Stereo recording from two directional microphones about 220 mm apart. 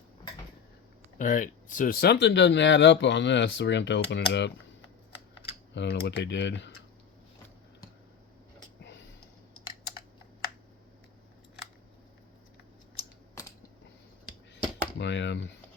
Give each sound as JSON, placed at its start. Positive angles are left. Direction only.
{"t": 1.2, "sound": "speech", "side_deg": 35}
{"t": 5.7, "sound": "speech", "side_deg": 50}
{"t": 8.8, "sound": "a sound", "side_deg": 50}
{"t": 13.0, "sound": "scissors", "side_deg": 15}
{"t": 14.9, "sound": "speech", "side_deg": 50}